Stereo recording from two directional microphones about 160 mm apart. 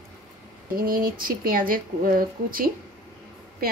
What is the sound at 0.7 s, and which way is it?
A woman's voice, 65° right (ahead or behind).